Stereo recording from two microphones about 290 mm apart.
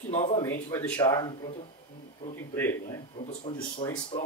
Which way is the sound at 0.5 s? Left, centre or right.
Centre.